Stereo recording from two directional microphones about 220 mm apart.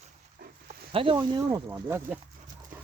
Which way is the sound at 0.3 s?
45° right (ahead or behind).